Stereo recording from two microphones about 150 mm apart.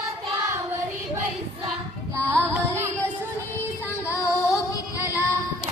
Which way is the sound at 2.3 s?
15° right (ahead or behind).